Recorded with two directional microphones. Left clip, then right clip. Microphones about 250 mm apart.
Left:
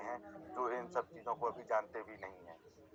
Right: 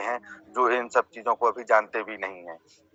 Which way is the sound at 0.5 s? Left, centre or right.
Right.